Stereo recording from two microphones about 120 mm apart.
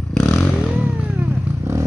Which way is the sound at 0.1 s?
5° left (ahead or behind).